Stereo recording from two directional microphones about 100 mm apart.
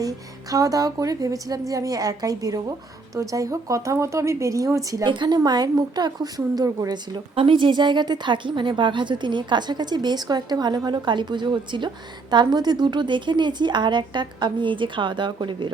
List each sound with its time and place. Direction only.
0.5 s a woman's voice: 35° right (ahead or behind)
5.0 s a woman's voice: 50° right (ahead or behind)
7.4 s a woman's voice: 55° right (ahead or behind)